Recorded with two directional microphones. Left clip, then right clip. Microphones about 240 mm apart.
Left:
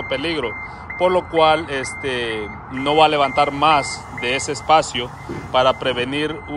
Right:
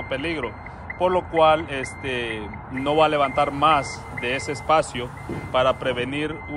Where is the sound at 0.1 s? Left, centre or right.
Centre.